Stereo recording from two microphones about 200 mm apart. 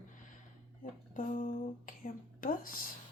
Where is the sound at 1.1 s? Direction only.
40° left (ahead or behind).